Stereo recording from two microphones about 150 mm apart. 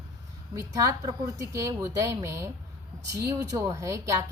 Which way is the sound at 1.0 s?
20° right (ahead or behind).